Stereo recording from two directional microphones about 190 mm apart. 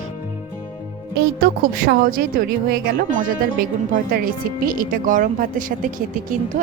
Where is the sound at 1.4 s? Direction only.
50° right (ahead or behind).